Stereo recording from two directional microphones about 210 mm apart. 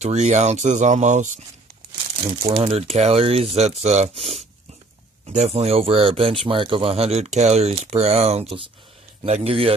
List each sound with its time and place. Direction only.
0.0 s speech: 35° right (ahead or behind)
2.6 s speech: 30° right (ahead or behind)